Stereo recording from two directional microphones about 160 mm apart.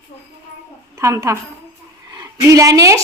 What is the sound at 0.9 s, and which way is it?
A woman's voice, 20° right (ahead or behind).